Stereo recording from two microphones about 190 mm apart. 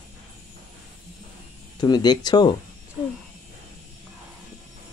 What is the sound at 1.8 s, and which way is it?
Speech, 20° left (ahead or behind).